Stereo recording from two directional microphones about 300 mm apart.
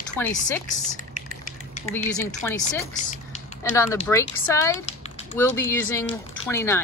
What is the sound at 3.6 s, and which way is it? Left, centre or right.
Speech, centre.